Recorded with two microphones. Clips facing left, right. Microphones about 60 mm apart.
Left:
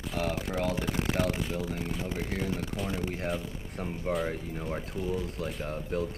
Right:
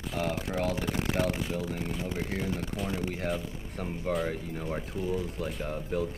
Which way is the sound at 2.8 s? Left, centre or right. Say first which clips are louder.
Even; centre.